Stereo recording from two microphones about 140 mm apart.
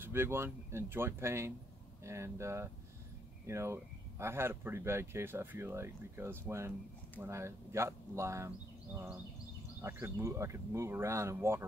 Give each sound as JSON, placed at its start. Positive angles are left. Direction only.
{"t": 0.0, "sound": "speech", "side_deg": -15}
{"t": 9.8, "sound": "speech", "side_deg": -20}